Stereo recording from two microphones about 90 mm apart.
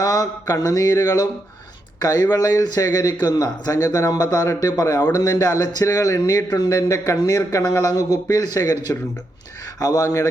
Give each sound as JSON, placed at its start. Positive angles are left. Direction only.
{"t": 0.0, "sound": "speech", "side_deg": 45}
{"t": 6.1, "sound": "speech", "side_deg": 45}